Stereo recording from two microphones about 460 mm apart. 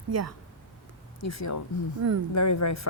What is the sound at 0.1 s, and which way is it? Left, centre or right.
Speech, right.